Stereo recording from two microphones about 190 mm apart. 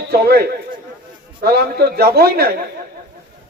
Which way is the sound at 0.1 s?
55° right (ahead or behind).